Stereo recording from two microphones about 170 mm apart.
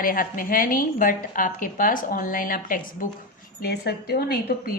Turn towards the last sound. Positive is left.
turn(degrees=70)  # may be behind; listen again after turning